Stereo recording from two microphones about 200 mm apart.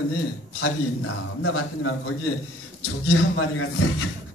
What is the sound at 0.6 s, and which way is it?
A man's voice, 90° left.